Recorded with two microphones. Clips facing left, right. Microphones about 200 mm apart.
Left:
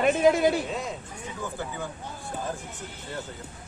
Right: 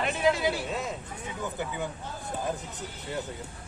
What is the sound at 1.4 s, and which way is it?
Speech, 20° right (ahead or behind).